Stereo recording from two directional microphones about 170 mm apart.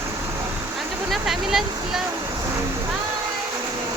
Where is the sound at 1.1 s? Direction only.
Centre (ahead or behind).